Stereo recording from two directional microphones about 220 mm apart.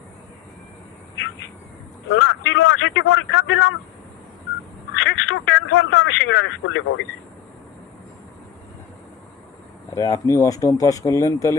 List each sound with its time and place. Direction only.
2.0 s a man's voice: 55° left (ahead or behind)
4.9 s speech: 55° left (ahead or behind)
9.9 s speech: 15° left (ahead or behind)